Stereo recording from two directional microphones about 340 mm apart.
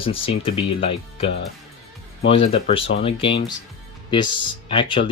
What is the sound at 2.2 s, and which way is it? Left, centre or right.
Speech, centre.